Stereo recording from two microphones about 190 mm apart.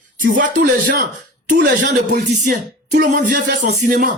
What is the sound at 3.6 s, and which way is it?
Speech, 40° right (ahead or behind).